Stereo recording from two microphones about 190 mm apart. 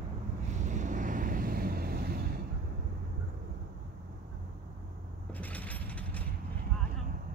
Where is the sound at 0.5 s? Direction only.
40° right (ahead or behind).